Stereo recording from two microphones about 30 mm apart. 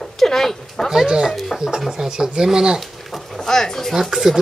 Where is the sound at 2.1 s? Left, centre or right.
Right.